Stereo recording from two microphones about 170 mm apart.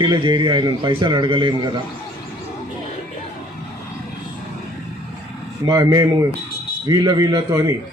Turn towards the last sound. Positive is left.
turn(degrees=-20)  # may be behind; listen again after turning